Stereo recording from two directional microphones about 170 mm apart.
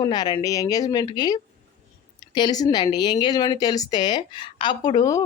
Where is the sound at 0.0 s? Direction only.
25° left (ahead or behind).